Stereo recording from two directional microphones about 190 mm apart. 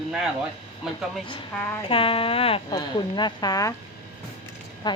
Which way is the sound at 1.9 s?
30° left (ahead or behind).